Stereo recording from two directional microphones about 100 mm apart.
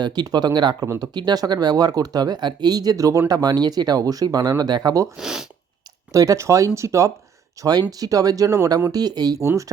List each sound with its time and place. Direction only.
0.0 s speech: 45° right (ahead or behind)
0.9 s speech: 30° right (ahead or behind)
1.1 s speech: 45° right (ahead or behind)
5.1 s speech: 5° right (ahead or behind)
6.1 s speech: 30° right (ahead or behind)